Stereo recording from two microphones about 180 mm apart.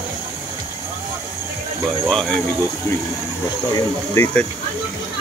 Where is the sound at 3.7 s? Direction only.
15° left (ahead or behind).